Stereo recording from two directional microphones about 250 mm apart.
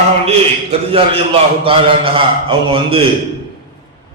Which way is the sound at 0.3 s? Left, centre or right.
Right.